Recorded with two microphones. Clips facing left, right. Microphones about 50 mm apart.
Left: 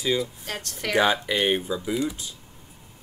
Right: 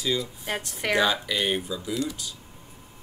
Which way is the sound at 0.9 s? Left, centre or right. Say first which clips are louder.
Left 2 dB; left.